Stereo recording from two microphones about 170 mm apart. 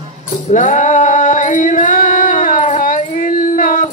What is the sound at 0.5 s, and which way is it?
Music, 45° left (ahead or behind).